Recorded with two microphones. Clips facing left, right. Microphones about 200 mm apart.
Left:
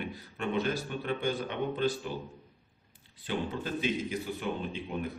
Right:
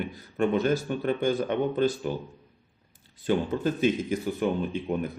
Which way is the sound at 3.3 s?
45° right (ahead or behind).